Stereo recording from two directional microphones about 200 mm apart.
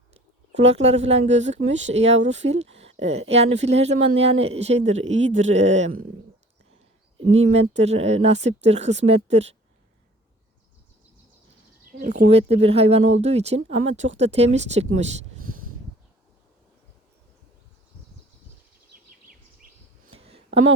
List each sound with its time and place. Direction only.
0.5 s speech: 35° right (ahead or behind)
5.1 s speech: 70° right (ahead or behind)
5.5 s speech: 35° right (ahead or behind)
7.3 s speech: 30° right (ahead or behind)
11.9 s a sound: 45° right (ahead or behind)
12.3 s speech: 30° right (ahead or behind)
20.1 s a sound: 30° right (ahead or behind)